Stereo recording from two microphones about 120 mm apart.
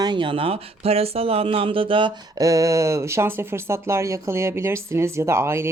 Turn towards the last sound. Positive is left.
turn(degrees=-20)  # may be behind; listen again after turning